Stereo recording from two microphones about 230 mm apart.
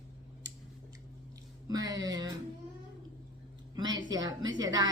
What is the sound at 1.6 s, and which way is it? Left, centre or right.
Speech, centre.